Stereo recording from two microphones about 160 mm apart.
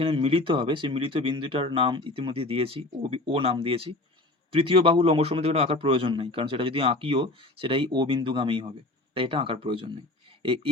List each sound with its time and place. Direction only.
0.0 s a man's voice: 40° right (ahead or behind)